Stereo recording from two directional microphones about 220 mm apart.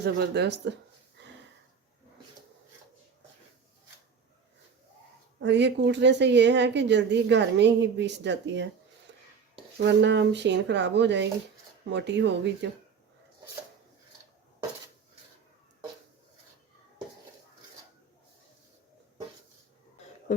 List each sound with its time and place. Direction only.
0.0 s a woman's voice: 50° right (ahead or behind)
5.4 s a woman's voice: 50° right (ahead or behind)
9.1 s a sound: 55° right (ahead or behind)
9.7 s a woman's voice: 50° right (ahead or behind)